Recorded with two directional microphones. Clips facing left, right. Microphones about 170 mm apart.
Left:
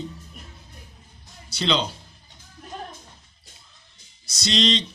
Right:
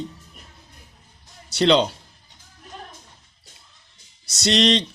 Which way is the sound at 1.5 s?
70° right (ahead or behind).